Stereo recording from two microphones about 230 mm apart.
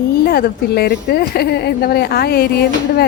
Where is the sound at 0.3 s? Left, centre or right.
Left.